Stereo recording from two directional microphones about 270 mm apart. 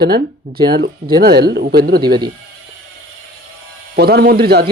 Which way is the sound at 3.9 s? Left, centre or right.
Right.